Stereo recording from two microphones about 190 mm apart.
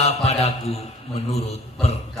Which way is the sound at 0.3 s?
35° left (ahead or behind).